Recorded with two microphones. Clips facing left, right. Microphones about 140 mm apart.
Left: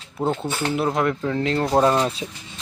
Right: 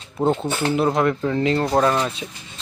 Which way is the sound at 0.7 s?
Centre (ahead or behind).